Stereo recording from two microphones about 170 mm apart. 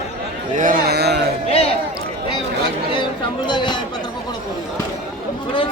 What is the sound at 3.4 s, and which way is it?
Chatter, 25° left (ahead or behind).